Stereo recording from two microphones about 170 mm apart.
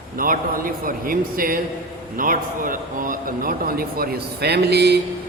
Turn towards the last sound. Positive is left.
turn(degrees=-75)  # may be behind; listen again after turning